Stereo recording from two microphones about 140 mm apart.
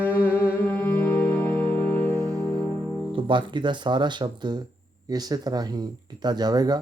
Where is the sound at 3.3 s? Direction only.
35° right (ahead or behind).